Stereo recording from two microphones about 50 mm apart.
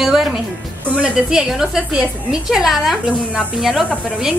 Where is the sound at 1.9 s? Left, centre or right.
Centre.